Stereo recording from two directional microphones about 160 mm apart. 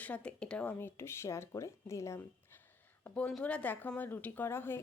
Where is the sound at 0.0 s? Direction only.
10° left (ahead or behind).